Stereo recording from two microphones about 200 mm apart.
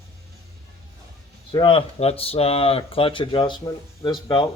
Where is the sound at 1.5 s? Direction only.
25° left (ahead or behind).